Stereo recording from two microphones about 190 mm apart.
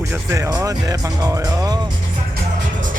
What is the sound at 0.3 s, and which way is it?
Speech, 15° right (ahead or behind).